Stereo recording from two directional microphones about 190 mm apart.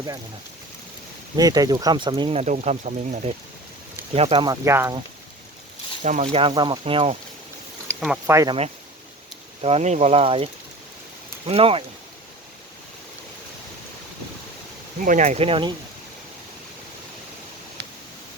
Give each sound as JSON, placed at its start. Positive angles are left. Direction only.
{"t": 1.4, "sound": "speech", "side_deg": -20}
{"t": 4.6, "sound": "speech", "side_deg": -15}
{"t": 6.0, "sound": "speech", "side_deg": -40}
{"t": 8.0, "sound": "speech", "side_deg": -5}
{"t": 9.6, "sound": "speech", "side_deg": -35}
{"t": 15.0, "sound": "speech", "side_deg": -40}
{"t": 17.8, "sound": "a sound", "side_deg": -60}